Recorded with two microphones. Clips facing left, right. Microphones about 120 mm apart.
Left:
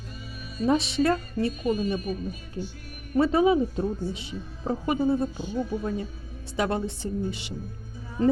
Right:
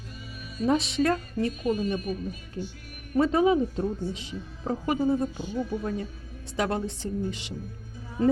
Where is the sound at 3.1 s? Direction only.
5° left (ahead or behind).